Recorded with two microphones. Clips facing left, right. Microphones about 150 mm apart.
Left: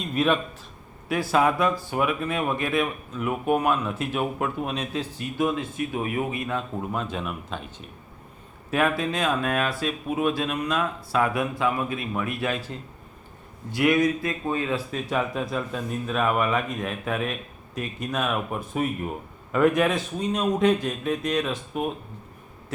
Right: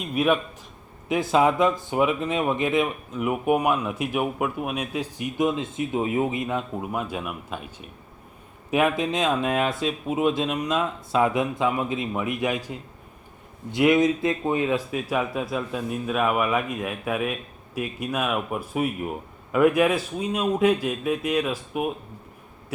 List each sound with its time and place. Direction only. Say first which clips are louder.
0.0 s speech: right 1 dB; 10° right (ahead or behind)
15.1 s speech: even; 5° right (ahead or behind)